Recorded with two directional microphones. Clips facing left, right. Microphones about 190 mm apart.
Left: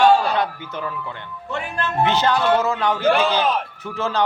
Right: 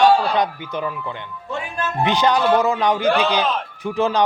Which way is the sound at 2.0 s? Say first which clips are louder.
Right 1 dB; 15° right (ahead or behind).